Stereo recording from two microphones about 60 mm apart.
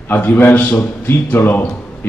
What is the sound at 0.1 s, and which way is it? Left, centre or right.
A man's voice, left.